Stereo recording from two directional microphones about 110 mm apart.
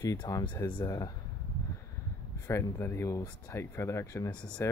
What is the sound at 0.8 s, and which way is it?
Speech, 35° left (ahead or behind).